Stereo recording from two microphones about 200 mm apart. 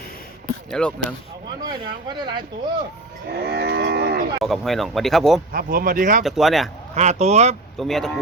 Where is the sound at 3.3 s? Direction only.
50° right (ahead or behind).